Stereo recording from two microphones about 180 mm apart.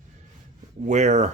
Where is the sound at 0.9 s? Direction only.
40° right (ahead or behind).